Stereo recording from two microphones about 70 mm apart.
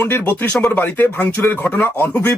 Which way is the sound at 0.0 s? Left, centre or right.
Left.